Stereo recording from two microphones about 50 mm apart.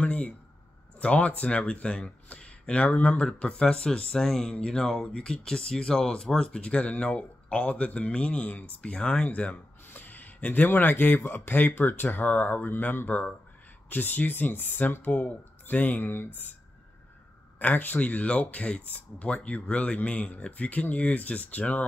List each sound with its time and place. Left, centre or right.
0.0 s a sound: left
0.9 s speech: left; by 6.5 s centre
6.5 s speech: left
9.8 s a sound: left
11.1 s speech: left
15.0 s speech: left
17.6 s speech: left